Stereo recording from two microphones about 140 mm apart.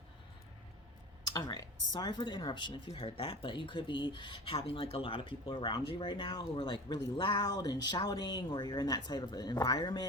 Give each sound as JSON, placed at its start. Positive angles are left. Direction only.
{"t": 1.3, "sound": "speech", "side_deg": 25}